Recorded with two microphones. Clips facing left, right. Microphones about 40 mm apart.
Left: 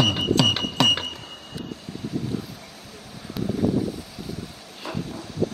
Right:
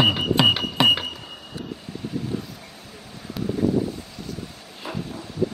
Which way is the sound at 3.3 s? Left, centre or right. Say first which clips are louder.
Even; centre.